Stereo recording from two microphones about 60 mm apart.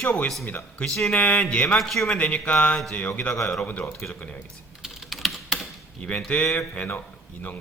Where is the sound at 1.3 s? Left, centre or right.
Centre.